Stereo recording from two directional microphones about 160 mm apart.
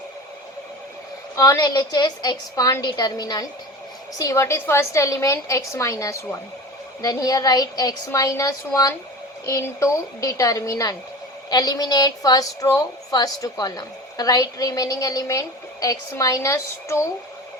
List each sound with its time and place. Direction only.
1.4 s a woman's voice: 20° left (ahead or behind)